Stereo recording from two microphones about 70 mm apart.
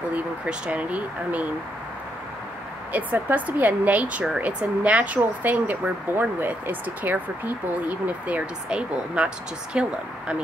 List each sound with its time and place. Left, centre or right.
0.1 s speech: centre
2.9 s speech: right